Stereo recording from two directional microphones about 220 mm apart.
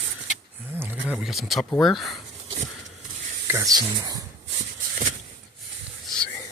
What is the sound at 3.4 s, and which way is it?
Speech, 15° right (ahead or behind).